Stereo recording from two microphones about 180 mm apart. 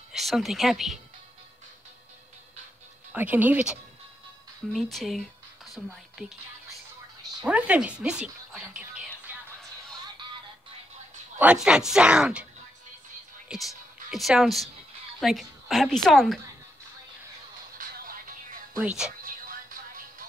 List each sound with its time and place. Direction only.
0.1 s speech: centre (ahead or behind)
3.1 s speech: 10° right (ahead or behind)
4.7 s a sound: centre (ahead or behind)
5.9 s a woman's voice: 5° right (ahead or behind)
7.4 s a sound: 5° right (ahead or behind)
11.3 s a woman's voice: 5° right (ahead or behind)
13.5 s a woman's voice: centre (ahead or behind)
17.7 s music: 50° right (ahead or behind)
18.8 s a woman's voice: 5° right (ahead or behind)
19.2 s music: 50° right (ahead or behind)